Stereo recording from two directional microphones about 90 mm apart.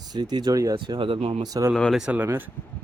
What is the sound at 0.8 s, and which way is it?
Speech, 65° right (ahead or behind).